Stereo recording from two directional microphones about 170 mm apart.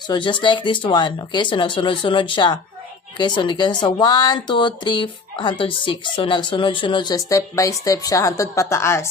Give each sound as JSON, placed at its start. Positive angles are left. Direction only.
{"t": 0.1, "sound": "speech", "side_deg": 30}